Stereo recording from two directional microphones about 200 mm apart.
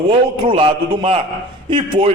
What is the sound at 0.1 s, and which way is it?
A man's voice, 25° right (ahead or behind).